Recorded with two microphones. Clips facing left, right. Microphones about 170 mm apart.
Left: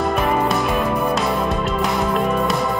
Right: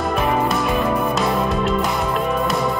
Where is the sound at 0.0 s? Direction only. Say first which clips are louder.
Left 1 dB; centre (ahead or behind).